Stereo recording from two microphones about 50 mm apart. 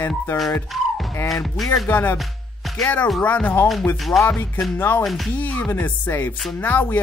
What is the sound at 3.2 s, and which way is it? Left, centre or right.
Speech, left.